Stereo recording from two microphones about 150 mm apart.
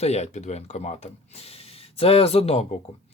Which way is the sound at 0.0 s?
45° left (ahead or behind).